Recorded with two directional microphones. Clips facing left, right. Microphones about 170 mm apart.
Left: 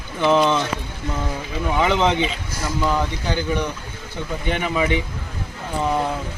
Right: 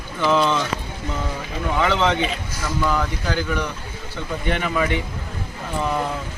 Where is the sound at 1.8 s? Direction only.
15° left (ahead or behind).